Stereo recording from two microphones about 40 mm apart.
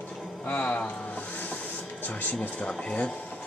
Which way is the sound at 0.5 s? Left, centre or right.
Left.